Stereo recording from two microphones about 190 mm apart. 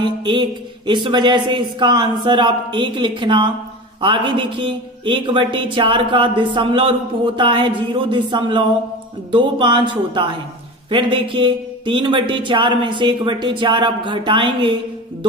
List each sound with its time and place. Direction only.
0.0 s speech: 25° right (ahead or behind)